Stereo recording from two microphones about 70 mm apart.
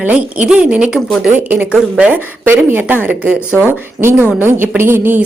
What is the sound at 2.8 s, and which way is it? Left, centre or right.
A woman's voice, right.